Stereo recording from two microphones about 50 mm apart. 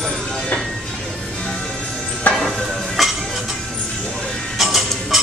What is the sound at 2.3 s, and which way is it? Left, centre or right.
Music, left.